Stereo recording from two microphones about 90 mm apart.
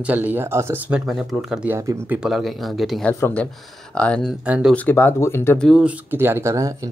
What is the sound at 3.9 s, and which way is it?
Speech, 10° left (ahead or behind).